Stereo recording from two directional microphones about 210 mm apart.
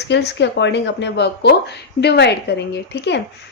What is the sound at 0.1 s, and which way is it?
A woman's voice, 55° left (ahead or behind).